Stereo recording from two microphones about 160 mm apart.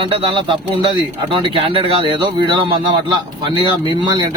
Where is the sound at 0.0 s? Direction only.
35° right (ahead or behind).